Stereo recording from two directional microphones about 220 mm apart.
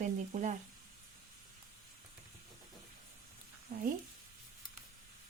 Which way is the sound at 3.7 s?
45° right (ahead or behind).